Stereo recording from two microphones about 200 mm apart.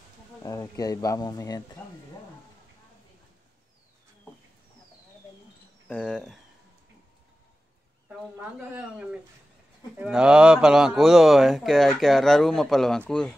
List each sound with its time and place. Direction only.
0.4 s speech: 20° left (ahead or behind)
5.9 s speech: 5° left (ahead or behind)
8.1 s speech: 5° right (ahead or behind)